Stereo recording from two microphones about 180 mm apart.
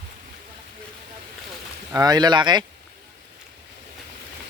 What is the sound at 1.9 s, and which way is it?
Speech, 20° right (ahead or behind).